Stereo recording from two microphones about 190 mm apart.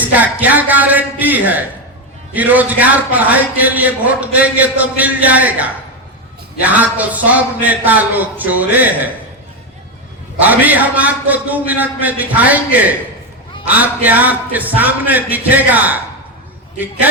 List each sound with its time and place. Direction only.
0.0 s a man's voice: 10° right (ahead or behind)
10.4 s a man's voice: 10° right (ahead or behind)